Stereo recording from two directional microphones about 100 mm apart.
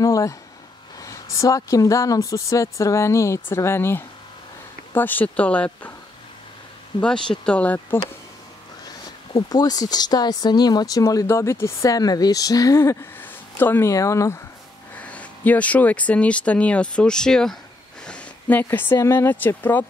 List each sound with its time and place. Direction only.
0.0 s a sound: 30° left (ahead or behind)
1.0 s speech: 30° left (ahead or behind); by 5.9 s 15° left (ahead or behind)
7.0 s speech: 10° left (ahead or behind)
9.3 s speech: 40° left (ahead or behind)
15.0 s speech: 15° left (ahead or behind)